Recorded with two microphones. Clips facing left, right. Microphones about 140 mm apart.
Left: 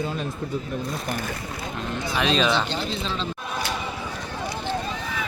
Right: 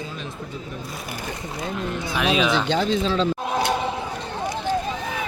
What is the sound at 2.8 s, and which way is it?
Speech, 40° right (ahead or behind).